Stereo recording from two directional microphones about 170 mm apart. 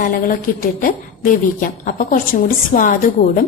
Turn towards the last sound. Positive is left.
turn(degrees=55)  # may be behind; listen again after turning